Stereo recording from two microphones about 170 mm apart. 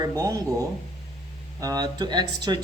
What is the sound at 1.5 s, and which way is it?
Speech, 20° right (ahead or behind).